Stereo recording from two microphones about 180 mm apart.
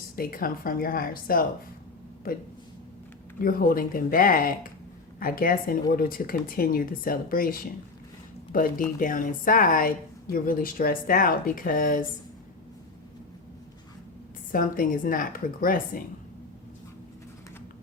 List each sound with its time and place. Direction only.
0.2 s speech: 55° left (ahead or behind)
3.4 s speech: 50° left (ahead or behind)
9.0 s speech: 50° left (ahead or behind)
14.5 s speech: 50° left (ahead or behind)